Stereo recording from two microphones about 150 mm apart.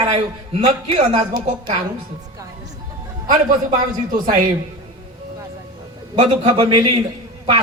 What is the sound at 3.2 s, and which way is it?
Speech, 30° right (ahead or behind).